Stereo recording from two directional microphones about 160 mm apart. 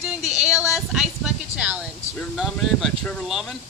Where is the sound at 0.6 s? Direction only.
5° right (ahead or behind).